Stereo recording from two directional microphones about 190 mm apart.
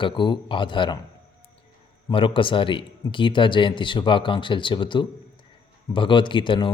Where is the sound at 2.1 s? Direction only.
25° left (ahead or behind).